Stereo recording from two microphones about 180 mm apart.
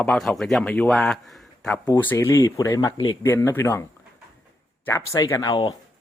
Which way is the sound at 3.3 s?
10° left (ahead or behind).